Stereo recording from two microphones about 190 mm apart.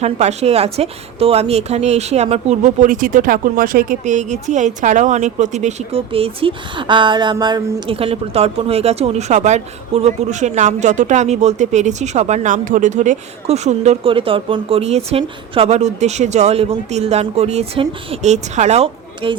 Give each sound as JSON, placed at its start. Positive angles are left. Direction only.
{"t": 0.0, "sound": "a woman's voice", "side_deg": -35}